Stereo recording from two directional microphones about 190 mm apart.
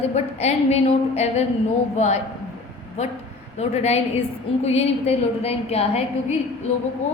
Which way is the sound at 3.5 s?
35° left (ahead or behind).